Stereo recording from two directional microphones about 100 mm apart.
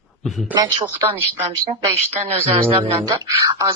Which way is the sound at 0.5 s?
45° right (ahead or behind).